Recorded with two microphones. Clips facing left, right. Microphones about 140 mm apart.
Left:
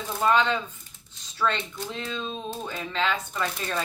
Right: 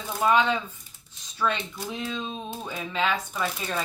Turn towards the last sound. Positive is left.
turn(degrees=-10)  # may be behind; listen again after turning